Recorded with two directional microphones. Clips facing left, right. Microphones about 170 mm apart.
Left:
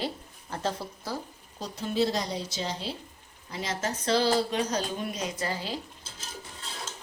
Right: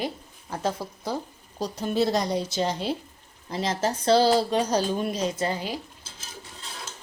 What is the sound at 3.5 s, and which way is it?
Speech, 35° right (ahead or behind).